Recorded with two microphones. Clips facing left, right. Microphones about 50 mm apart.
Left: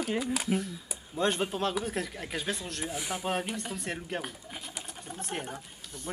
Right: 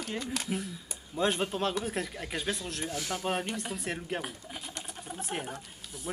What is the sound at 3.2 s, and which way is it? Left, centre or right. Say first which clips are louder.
Speech: even; centre.